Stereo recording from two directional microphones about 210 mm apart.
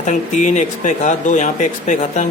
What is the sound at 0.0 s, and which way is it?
Speech, 35° left (ahead or behind).